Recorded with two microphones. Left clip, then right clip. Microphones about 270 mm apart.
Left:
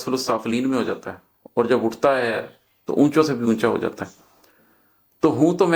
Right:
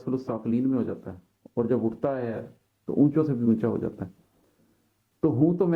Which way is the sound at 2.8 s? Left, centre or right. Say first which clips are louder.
Left 6 dB; centre.